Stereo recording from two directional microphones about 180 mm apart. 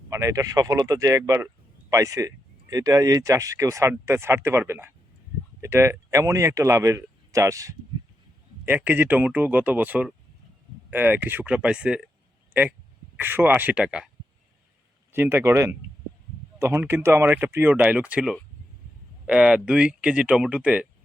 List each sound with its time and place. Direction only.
0.1 s speech: 20° right (ahead or behind)
13.1 s speech: 10° right (ahead or behind)
15.1 s speech: 15° right (ahead or behind)